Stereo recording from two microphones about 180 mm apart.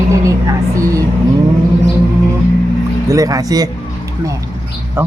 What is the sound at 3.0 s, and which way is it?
Speech, 20° right (ahead or behind).